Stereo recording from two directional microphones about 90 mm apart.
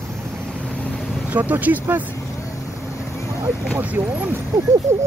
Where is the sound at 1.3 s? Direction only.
20° right (ahead or behind).